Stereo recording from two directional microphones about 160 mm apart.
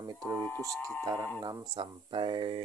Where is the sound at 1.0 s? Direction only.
20° right (ahead or behind).